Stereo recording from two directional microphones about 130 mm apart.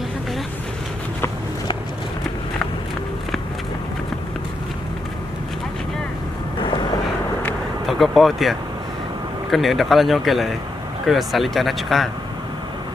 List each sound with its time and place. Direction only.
6.6 s vehicle: 35° left (ahead or behind)
7.8 s speech: centre (ahead or behind)